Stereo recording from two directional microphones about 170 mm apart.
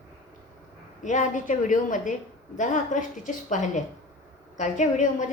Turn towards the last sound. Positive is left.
turn(degrees=45)  # may be behind; listen again after turning